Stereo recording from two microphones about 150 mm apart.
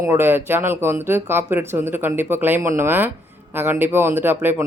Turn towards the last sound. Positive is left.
turn(degrees=-15)  # may be behind; listen again after turning